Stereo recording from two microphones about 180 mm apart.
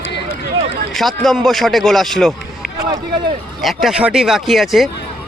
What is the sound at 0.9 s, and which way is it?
Speech, centre (ahead or behind).